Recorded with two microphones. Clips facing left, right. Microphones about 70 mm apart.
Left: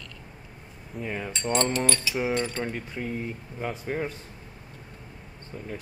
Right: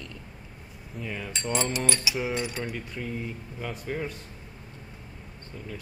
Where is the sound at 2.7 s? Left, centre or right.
Left.